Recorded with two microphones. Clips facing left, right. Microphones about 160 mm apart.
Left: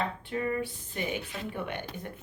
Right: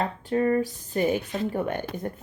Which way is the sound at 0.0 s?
40° right (ahead or behind).